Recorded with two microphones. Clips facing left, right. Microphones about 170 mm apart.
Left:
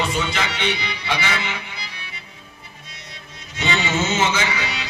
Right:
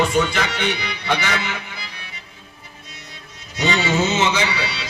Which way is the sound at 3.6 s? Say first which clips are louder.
Right 3 dB; 40° right (ahead or behind).